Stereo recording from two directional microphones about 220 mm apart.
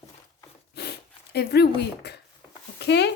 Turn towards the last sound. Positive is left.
turn(degrees=50)  # may be behind; listen again after turning